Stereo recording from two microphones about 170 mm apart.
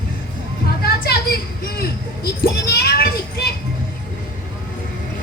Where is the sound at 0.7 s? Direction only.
65° left (ahead or behind).